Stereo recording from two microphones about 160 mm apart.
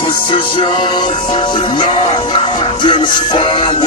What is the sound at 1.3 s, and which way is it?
Speech, 30° left (ahead or behind).